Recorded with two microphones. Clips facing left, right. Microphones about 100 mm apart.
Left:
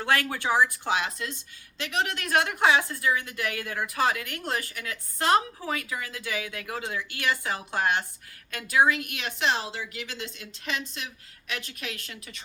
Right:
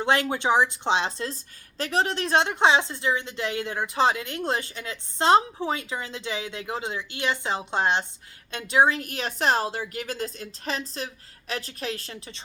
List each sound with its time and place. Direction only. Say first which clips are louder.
0.0 s a woman's voice: right 3 dB; 20° right (ahead or behind)